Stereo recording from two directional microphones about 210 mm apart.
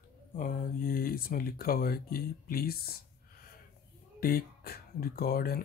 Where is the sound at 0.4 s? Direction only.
40° left (ahead or behind).